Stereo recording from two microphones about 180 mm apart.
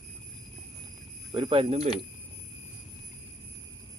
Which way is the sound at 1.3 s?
30° right (ahead or behind).